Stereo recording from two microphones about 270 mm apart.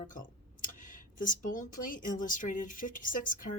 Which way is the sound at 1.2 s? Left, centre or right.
Left.